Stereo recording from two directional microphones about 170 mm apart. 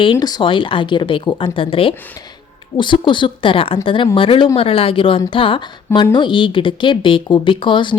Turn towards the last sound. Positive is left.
turn(degrees=30)  # may be behind; listen again after turning